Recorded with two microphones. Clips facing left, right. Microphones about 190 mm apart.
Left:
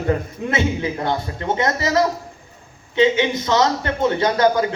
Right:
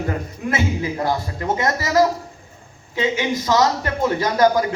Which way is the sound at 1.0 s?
25° left (ahead or behind).